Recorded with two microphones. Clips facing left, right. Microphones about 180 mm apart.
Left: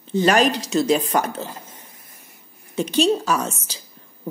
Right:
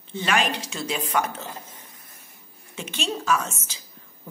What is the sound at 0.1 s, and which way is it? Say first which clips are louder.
A woman's voice: left 8 dB; 40° left (ahead or behind).